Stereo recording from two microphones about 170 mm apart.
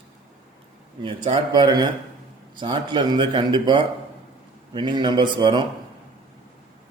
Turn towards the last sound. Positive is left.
turn(degrees=-25)  # may be behind; listen again after turning